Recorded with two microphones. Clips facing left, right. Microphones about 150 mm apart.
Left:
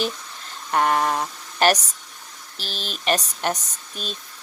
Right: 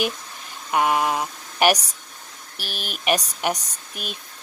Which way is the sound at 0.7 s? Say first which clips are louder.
Even; 10° right (ahead or behind).